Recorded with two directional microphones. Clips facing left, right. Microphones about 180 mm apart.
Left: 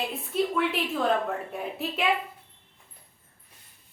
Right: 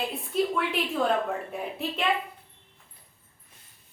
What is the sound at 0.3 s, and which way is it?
A woman's voice, centre (ahead or behind).